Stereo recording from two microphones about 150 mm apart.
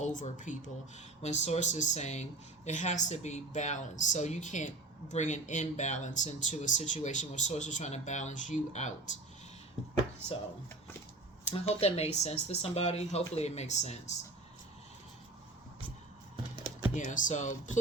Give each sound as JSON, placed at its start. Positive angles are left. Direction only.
{"t": 0.0, "sound": "speech", "side_deg": 55}
{"t": 11.4, "sound": "speech", "side_deg": 45}
{"t": 16.6, "sound": "computer keyboard", "side_deg": -25}
{"t": 16.9, "sound": "speech", "side_deg": 55}